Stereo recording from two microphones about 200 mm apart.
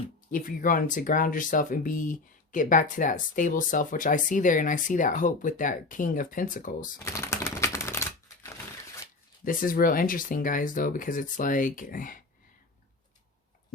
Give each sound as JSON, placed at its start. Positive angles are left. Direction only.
{"t": 0.3, "sound": "speech", "side_deg": 45}
{"t": 7.0, "sound": "typing", "side_deg": 15}
{"t": 9.4, "sound": "speech", "side_deg": 45}